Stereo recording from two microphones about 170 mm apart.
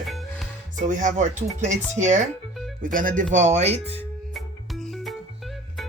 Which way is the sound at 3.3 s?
40° right (ahead or behind).